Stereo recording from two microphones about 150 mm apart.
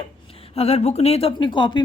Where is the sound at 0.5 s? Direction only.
45° left (ahead or behind).